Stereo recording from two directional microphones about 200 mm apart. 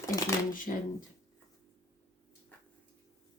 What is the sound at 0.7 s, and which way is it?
Speech, 40° left (ahead or behind).